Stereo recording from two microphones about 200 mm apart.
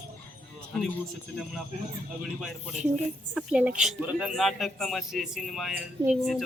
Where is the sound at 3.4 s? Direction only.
5° right (ahead or behind).